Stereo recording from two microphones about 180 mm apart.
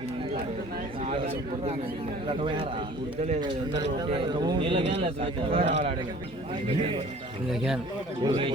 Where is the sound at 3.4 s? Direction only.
25° right (ahead or behind).